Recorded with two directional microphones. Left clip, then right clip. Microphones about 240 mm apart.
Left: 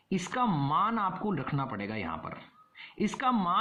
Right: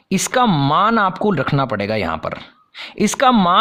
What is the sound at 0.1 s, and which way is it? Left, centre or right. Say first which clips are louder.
Speech: right 14 dB; right.